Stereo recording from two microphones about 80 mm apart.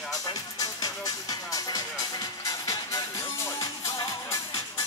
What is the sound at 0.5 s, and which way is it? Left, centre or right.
Music, left.